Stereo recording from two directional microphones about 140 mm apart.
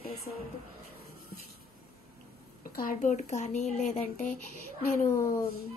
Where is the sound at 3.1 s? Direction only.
55° left (ahead or behind).